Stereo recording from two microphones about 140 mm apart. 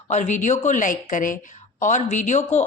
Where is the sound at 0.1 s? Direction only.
60° left (ahead or behind).